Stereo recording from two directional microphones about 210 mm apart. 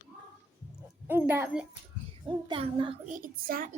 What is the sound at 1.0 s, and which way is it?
Speech, 10° right (ahead or behind).